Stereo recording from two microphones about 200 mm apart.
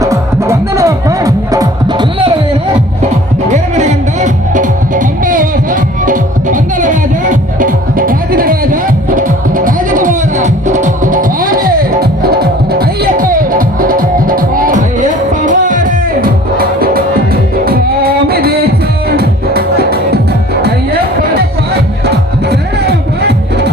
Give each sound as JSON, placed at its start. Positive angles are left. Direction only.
{"t": 0.0, "sound": "music", "side_deg": -15}
{"t": 3.5, "sound": "music", "side_deg": -35}
{"t": 22.0, "sound": "music", "side_deg": -55}